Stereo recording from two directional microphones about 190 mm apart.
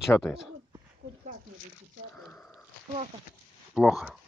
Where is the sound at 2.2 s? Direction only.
5° left (ahead or behind).